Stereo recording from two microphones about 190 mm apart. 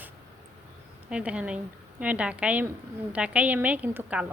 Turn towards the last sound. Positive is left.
turn(degrees=-5)  # may be behind; listen again after turning